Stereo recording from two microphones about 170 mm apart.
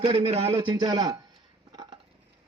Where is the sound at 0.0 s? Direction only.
35° right (ahead or behind).